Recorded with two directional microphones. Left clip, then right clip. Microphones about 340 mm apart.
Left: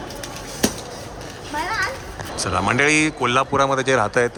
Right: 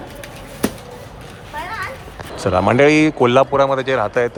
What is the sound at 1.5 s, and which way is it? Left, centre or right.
Children playing, left.